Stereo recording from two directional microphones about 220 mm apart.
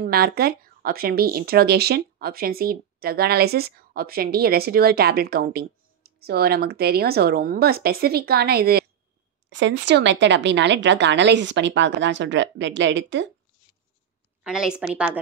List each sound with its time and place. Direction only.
0.0 s a woman's voice: 45° right (ahead or behind)
14.4 s a woman's voice: 5° right (ahead or behind)